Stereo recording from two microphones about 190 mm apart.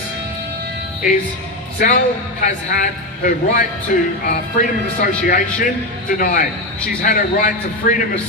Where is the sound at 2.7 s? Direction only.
50° left (ahead or behind).